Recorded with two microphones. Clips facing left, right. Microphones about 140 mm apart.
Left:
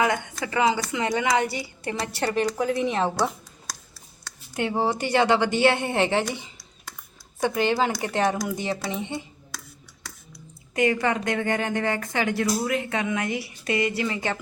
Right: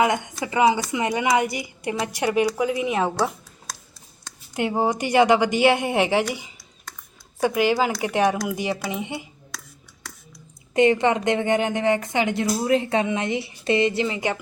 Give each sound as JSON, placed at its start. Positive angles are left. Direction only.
{"t": 0.4, "sound": "a woman's voice", "side_deg": -20}
{"t": 7.4, "sound": "a woman's voice", "side_deg": -10}
{"t": 10.8, "sound": "a woman's voice", "side_deg": -20}